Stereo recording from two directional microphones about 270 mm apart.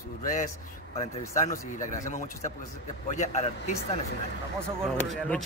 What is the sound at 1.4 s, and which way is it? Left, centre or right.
A man's voice, left.